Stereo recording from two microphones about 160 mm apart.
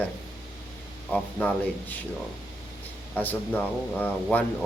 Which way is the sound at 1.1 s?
5° left (ahead or behind).